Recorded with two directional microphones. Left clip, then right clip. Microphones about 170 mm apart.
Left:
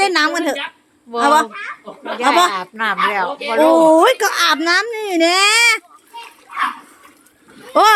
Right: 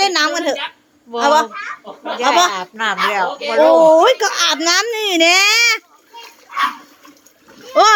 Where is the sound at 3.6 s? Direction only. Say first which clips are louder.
Right 1 dB; 20° left (ahead or behind).